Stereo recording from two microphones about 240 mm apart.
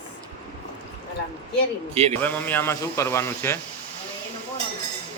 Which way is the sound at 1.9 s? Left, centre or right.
Right.